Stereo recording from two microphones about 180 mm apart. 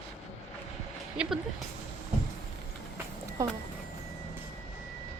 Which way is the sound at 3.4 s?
15° right (ahead or behind).